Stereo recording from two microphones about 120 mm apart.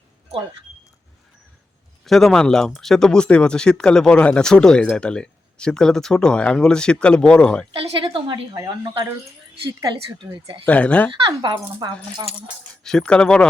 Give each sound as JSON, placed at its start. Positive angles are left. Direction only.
{"t": 2.0, "sound": "speech", "side_deg": 0}
{"t": 7.7, "sound": "a woman's voice", "side_deg": -45}
{"t": 9.6, "sound": "speech", "side_deg": -40}
{"t": 10.7, "sound": "speech", "side_deg": 10}
{"t": 11.3, "sound": "speech", "side_deg": -35}
{"t": 12.8, "sound": "speech", "side_deg": 5}